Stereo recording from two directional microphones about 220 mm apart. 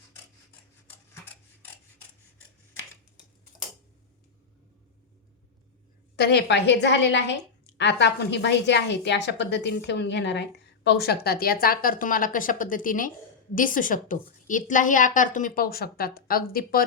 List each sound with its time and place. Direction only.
6.1 s a woman's voice: 50° left (ahead or behind)